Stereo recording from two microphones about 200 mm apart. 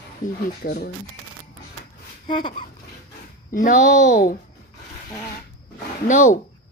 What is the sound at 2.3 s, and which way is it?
Speech, 25° left (ahead or behind).